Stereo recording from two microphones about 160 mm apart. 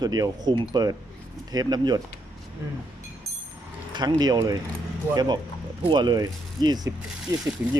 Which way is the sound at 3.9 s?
25° right (ahead or behind).